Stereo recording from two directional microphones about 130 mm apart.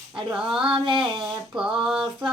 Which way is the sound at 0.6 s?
40° right (ahead or behind).